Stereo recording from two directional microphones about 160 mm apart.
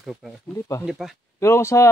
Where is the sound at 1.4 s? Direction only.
15° left (ahead or behind).